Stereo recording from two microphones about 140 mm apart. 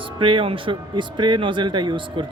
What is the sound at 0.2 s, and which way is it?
Speech, 40° right (ahead or behind).